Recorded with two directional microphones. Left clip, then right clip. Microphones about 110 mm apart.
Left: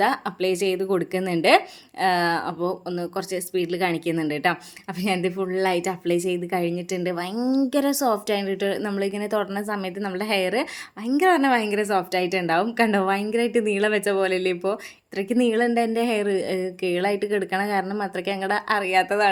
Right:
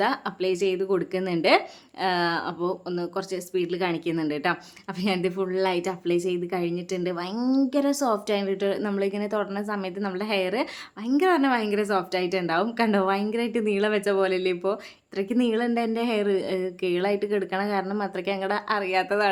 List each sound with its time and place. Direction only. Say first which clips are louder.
0.0 s a woman's voice: left 3 dB; 25° left (ahead or behind)
7.3 s a woman's voice: even; 15° left (ahead or behind)
7.7 s a woman's voice: left 2 dB; 30° left (ahead or behind)